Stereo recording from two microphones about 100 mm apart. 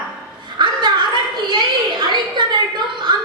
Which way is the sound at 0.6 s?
50° right (ahead or behind).